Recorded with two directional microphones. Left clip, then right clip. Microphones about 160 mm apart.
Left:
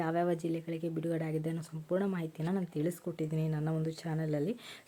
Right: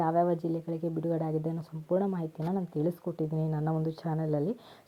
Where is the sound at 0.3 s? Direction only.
5° right (ahead or behind).